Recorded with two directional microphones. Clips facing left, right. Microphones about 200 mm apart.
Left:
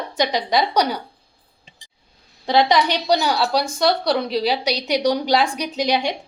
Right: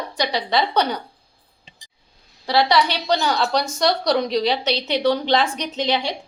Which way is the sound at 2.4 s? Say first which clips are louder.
Left 1 dB; 20° left (ahead or behind).